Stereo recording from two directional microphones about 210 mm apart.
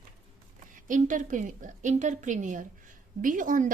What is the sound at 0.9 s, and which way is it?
A woman's voice, 40° right (ahead or behind).